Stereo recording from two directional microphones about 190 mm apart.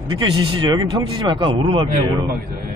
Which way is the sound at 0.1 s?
25° right (ahead or behind).